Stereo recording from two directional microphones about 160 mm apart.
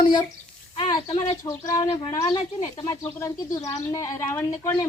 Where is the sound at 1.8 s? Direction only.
35° left (ahead or behind).